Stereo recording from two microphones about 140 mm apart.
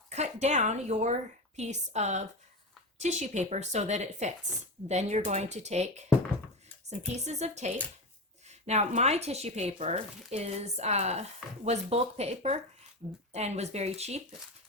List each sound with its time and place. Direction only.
0.1 s a woman's voice: 55° right (ahead or behind)
7.3 s speech: 55° right (ahead or behind)